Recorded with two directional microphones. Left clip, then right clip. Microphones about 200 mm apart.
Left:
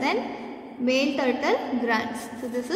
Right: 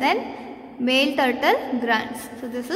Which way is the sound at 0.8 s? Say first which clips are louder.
Right 4 dB; 30° right (ahead or behind).